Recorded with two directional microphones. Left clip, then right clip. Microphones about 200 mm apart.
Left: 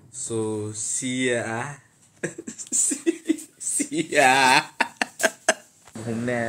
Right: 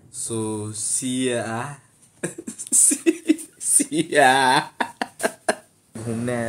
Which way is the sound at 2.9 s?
45° right (ahead or behind).